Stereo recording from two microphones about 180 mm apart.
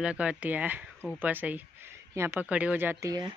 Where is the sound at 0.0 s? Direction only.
5° right (ahead or behind).